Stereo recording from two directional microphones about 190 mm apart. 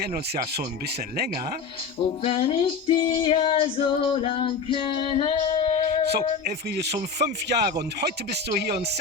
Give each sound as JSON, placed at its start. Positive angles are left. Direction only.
{"t": 0.0, "sound": "speech", "side_deg": -55}
{"t": 2.2, "sound": "female singing", "side_deg": 30}
{"t": 5.8, "sound": "music", "side_deg": 25}
{"t": 6.1, "sound": "speech", "side_deg": -60}